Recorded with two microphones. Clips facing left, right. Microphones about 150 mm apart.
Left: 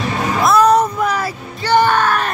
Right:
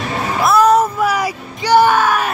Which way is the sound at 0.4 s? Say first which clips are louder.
Even; 5° right (ahead or behind).